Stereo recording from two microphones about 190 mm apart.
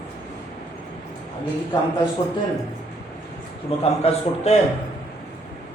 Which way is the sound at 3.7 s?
30° left (ahead or behind).